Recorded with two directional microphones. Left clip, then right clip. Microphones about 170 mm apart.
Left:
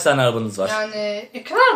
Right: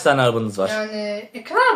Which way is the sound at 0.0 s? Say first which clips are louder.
Even; 25° right (ahead or behind).